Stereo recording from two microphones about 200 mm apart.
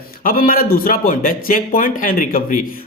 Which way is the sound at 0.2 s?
45° left (ahead or behind).